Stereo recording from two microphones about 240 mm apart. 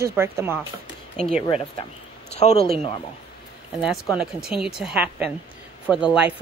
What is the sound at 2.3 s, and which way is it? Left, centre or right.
Speech, left.